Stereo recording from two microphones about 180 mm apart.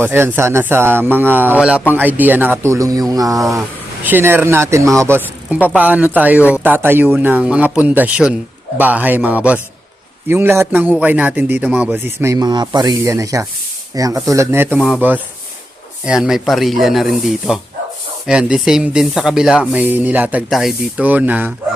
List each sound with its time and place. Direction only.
0.0 s speech: 10° right (ahead or behind)
3.1 s a sound: 20° right (ahead or behind)
3.5 s speech: 10° right (ahead or behind)
14.8 s speech: centre (ahead or behind)
16.0 s speech: 5° right (ahead or behind)